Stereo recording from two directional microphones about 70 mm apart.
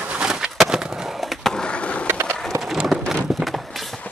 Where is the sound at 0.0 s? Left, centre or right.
Centre.